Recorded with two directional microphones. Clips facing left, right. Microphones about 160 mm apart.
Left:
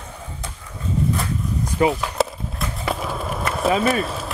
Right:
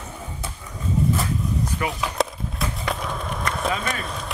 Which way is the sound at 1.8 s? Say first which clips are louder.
Left 13 dB; 25° left (ahead or behind).